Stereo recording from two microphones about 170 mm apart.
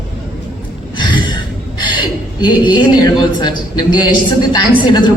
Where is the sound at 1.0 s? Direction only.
25° left (ahead or behind).